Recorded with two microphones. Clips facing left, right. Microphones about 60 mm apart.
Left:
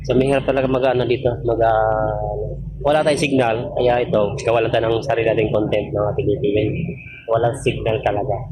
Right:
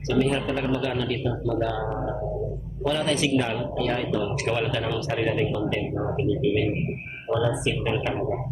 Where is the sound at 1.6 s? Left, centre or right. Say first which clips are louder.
Left 17 dB; left.